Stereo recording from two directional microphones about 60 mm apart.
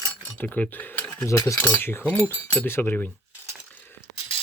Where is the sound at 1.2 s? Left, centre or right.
Left.